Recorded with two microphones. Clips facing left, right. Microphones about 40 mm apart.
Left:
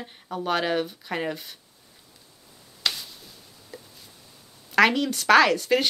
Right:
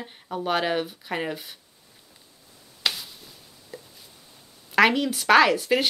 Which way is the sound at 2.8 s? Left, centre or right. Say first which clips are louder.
Right 1 dB; centre.